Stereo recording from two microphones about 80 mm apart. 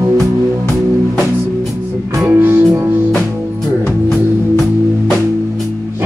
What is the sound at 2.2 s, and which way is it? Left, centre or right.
Music, right.